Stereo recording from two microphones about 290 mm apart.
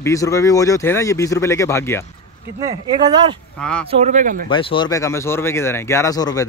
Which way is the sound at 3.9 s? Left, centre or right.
Right.